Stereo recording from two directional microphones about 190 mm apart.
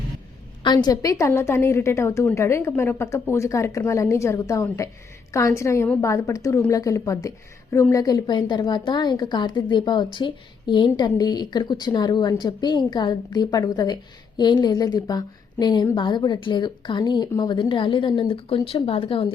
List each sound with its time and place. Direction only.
0.6 s a woman's voice: 20° left (ahead or behind)